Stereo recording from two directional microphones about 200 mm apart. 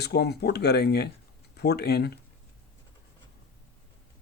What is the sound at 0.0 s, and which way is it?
Speech, 55° left (ahead or behind).